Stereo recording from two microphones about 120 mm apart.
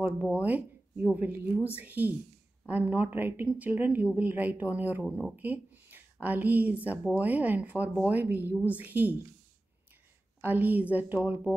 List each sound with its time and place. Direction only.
0.2 s speech: 10° right (ahead or behind)
5.0 s speech: 5° right (ahead or behind)
5.3 s speech: 15° right (ahead or behind)
10.4 s speech: 15° right (ahead or behind)